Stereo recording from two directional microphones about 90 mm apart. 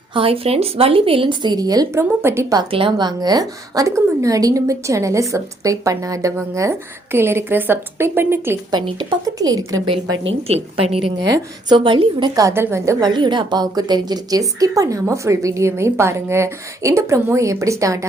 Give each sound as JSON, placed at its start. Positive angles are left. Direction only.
{"t": 0.1, "sound": "a woman's voice", "side_deg": -90}
{"t": 3.0, "sound": "speech", "side_deg": -50}
{"t": 8.7, "sound": "a woman's voice", "side_deg": -60}
{"t": 9.2, "sound": "speech", "side_deg": -45}
{"t": 10.2, "sound": "a woman's voice", "side_deg": -90}
{"t": 11.8, "sound": "a woman's voice", "side_deg": -70}
{"t": 12.4, "sound": "speech", "side_deg": -35}
{"t": 13.0, "sound": "speech", "side_deg": -55}